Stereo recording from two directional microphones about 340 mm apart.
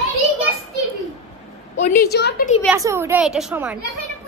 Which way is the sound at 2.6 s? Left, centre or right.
Centre.